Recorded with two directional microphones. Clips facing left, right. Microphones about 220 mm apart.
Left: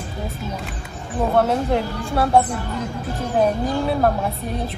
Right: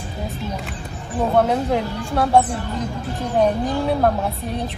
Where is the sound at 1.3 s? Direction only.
Centre (ahead or behind).